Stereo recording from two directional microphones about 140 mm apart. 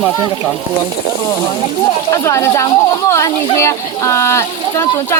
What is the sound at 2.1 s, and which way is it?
Speech, 20° left (ahead or behind).